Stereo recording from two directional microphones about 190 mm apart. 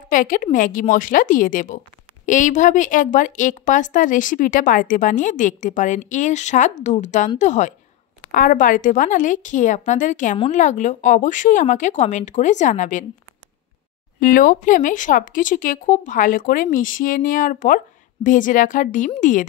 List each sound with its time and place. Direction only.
0.1 s a woman's voice: 45° left (ahead or behind)
14.2 s speech: 45° left (ahead or behind)